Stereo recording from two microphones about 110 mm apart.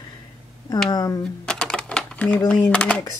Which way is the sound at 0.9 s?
35° left (ahead or behind).